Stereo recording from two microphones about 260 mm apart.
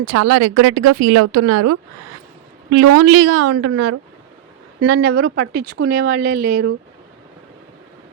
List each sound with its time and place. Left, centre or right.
0.0 s speech: right
4.9 s speech: right